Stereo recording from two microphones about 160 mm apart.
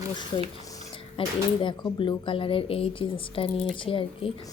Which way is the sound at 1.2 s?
35° left (ahead or behind).